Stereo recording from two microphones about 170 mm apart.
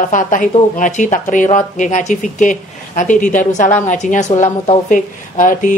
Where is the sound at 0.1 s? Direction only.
50° left (ahead or behind).